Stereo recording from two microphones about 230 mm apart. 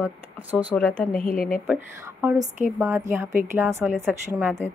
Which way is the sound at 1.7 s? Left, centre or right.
Centre.